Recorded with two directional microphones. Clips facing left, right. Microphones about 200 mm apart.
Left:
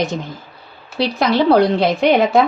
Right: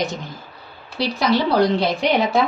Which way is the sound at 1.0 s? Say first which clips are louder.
Left 3 dB; 55° left (ahead or behind).